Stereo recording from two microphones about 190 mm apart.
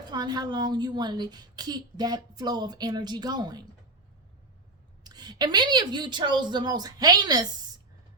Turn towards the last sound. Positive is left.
turn(degrees=-20)  # may be behind; listen again after turning